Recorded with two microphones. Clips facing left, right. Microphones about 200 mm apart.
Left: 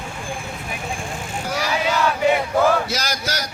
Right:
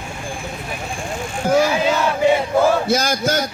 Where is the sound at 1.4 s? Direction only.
50° right (ahead or behind).